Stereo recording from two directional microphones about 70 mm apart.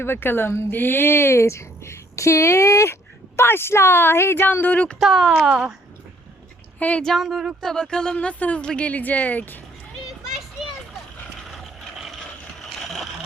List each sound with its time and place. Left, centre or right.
0.0 s speech: left
4.9 s speech: centre
5.5 s speech: centre
6.7 s speech: left
7.0 s speech: centre; by 9.6 s left
11.5 s vehicle: centre